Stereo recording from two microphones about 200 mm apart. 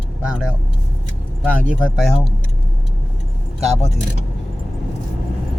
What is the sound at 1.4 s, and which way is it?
Speech, 5° right (ahead or behind).